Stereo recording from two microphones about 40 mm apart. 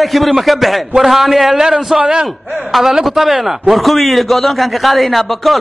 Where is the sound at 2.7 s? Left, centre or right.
Centre.